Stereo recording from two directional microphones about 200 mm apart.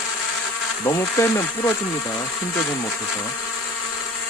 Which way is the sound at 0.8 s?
15° left (ahead or behind).